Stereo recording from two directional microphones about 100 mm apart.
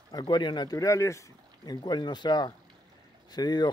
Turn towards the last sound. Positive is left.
turn(degrees=45)  # may be behind; listen again after turning